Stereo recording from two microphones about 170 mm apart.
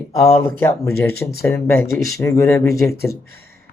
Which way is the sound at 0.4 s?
15° left (ahead or behind).